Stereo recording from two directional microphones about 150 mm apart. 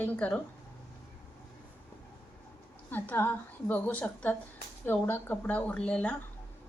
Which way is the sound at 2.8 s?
10° left (ahead or behind).